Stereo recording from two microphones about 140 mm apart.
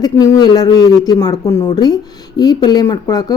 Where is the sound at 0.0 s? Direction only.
30° left (ahead or behind).